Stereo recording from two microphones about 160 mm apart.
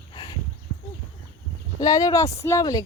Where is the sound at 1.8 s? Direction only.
20° left (ahead or behind).